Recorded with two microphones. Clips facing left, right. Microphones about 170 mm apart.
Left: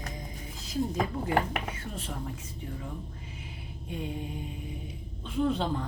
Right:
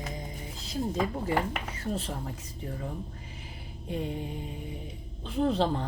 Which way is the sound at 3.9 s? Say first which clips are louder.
Right 2 dB; 30° right (ahead or behind).